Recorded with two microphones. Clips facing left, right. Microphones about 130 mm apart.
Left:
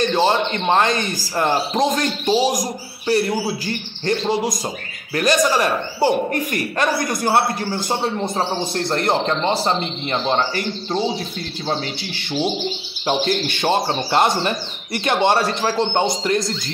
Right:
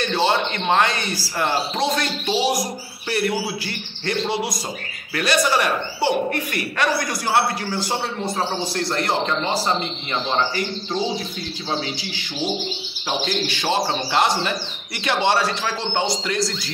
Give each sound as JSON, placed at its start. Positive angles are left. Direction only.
{"t": 0.2, "sound": "a man's voice", "side_deg": 40}
{"t": 1.3, "sound": "speech", "side_deg": 20}
{"t": 1.8, "sound": "a man's voice", "side_deg": 45}
{"t": 7.7, "sound": "speech", "side_deg": 25}
{"t": 8.9, "sound": "a man's voice", "side_deg": 50}
{"t": 13.0, "sound": "a man's voice", "side_deg": 55}